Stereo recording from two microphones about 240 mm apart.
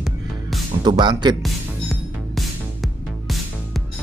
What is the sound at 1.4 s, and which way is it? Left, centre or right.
Music, centre.